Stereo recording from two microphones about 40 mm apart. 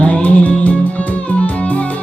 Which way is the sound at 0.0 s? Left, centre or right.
Left.